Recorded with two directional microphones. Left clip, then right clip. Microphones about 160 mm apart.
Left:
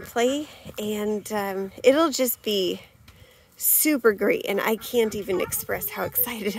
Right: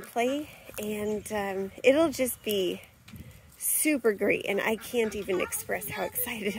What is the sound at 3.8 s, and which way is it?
Speech, 35° left (ahead or behind).